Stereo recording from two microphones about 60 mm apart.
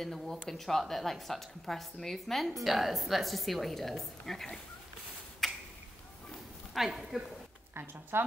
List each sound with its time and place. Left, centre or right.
0.0 s a woman's voice: centre
5.4 s a sound: centre
6.7 s a woman's voice: centre
7.7 s speech: right